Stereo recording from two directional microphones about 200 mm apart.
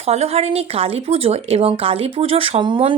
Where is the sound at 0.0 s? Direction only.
30° right (ahead or behind).